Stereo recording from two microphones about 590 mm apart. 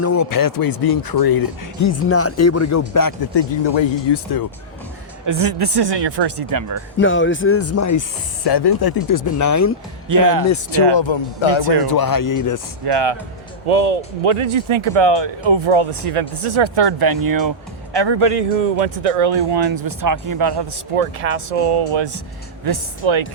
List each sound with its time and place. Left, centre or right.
0.0 s speech: left
5.2 s speech: right
7.0 s speech: centre
8.4 s speech: left
10.1 s speech: right
10.5 s speech: left
10.9 s speech: left
11.9 s speech: left
12.8 s speech: right
13.7 s speech: right
17.9 s speech: right
19.5 s speech: right
20.9 s speech: right
22.6 s speech: right